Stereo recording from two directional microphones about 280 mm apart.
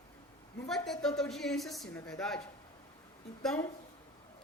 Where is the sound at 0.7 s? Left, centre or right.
Centre.